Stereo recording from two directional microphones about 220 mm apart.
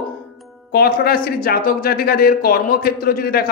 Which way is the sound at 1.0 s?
45° left (ahead or behind).